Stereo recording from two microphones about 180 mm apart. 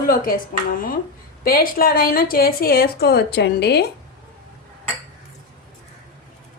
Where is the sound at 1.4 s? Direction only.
55° left (ahead or behind).